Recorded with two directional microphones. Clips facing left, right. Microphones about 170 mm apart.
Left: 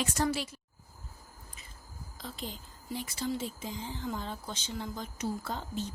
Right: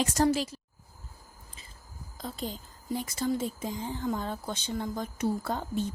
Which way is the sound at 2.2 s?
40° right (ahead or behind).